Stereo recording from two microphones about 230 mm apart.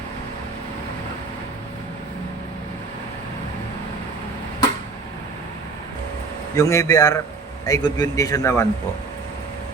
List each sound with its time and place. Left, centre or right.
6.6 s a man's voice: centre